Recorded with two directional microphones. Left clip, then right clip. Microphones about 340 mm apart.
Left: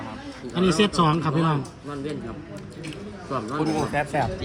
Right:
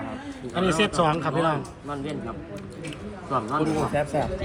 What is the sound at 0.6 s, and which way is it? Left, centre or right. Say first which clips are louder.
Speech: left 1 dB; centre.